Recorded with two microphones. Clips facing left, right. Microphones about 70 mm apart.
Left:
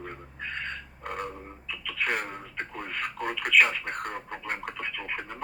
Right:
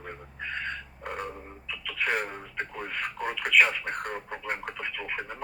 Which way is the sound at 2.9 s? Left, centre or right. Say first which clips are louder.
Even; centre.